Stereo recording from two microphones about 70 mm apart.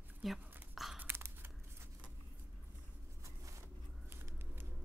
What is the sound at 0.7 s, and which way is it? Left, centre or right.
Biting, centre.